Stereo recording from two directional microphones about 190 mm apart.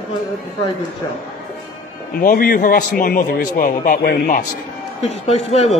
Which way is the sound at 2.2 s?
50° left (ahead or behind).